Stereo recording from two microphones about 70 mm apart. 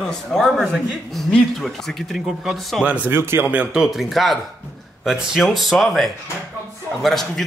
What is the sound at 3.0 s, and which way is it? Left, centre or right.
Speech, right.